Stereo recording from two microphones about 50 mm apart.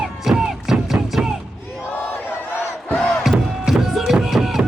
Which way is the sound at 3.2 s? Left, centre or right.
Centre.